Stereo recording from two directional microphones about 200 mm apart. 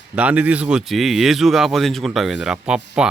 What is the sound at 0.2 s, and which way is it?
Speech, 5° right (ahead or behind).